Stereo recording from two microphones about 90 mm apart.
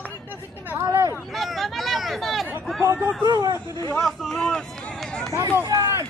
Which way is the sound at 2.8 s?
25° right (ahead or behind).